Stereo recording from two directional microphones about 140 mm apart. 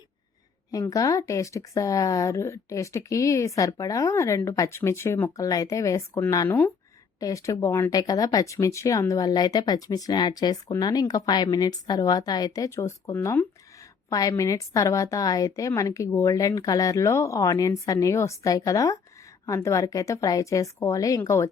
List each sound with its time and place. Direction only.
0.7 s a woman's voice: 25° left (ahead or behind)